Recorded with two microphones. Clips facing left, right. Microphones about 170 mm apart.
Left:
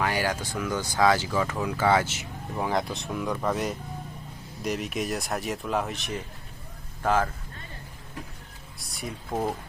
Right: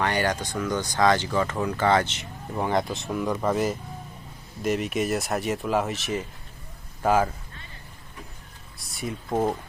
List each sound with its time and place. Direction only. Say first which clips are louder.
0.0 s speech: right 2 dB; 5° left (ahead or behind)
8.8 s speech: right 4 dB; centre (ahead or behind)
9.3 s speech: right 4 dB; 20° right (ahead or behind)